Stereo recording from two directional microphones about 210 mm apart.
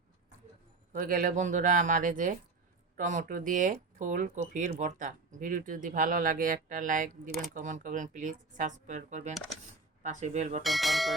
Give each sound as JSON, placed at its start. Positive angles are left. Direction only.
{"t": 0.9, "sound": "speech", "side_deg": -40}
{"t": 10.6, "sound": "speech", "side_deg": 0}